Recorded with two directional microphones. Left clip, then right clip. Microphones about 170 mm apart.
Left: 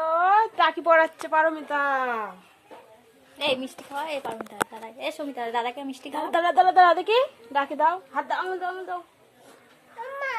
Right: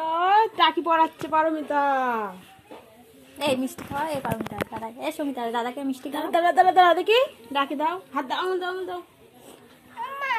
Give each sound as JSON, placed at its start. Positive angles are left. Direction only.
{"t": 0.0, "sound": "a woman's voice", "side_deg": 0}
{"t": 3.3, "sound": "a woman's voice", "side_deg": -5}
{"t": 5.9, "sound": "a woman's voice", "side_deg": 30}
{"t": 7.5, "sound": "a woman's voice", "side_deg": 20}
{"t": 8.1, "sound": "speech", "side_deg": 0}